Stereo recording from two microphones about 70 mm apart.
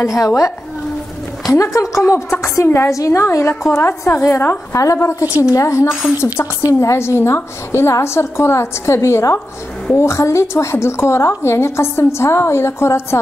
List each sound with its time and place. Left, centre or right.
0.0 s a woman's voice: left
1.5 s a woman's voice: left
4.1 s a woman's voice: left
4.7 s a woman's voice: left